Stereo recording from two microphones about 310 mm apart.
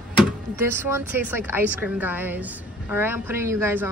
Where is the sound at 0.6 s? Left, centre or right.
Centre.